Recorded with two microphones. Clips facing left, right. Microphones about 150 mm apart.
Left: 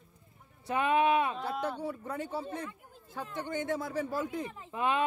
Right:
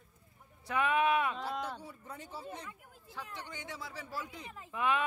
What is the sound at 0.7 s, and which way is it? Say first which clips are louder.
Speech: left 3 dB; 25° left (ahead or behind).